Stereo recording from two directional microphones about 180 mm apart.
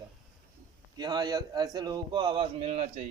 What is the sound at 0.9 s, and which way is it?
A man's voice, 25° right (ahead or behind).